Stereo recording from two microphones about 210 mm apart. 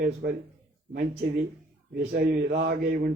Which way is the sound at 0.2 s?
50° right (ahead or behind).